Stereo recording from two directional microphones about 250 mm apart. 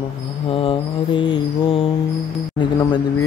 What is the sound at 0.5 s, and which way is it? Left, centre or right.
Mantra, left.